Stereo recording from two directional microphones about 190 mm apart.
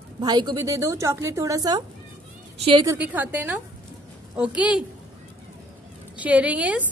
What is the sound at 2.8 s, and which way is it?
A woman's voice, 10° right (ahead or behind).